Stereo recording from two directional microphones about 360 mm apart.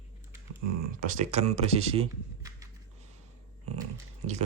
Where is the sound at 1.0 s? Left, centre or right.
Centre.